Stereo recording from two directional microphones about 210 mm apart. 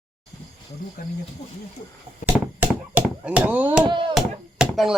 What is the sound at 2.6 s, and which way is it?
Chop, 5° right (ahead or behind).